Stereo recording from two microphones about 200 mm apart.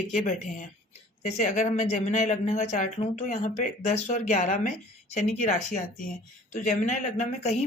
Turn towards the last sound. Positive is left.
turn(degrees=35)  # may be behind; listen again after turning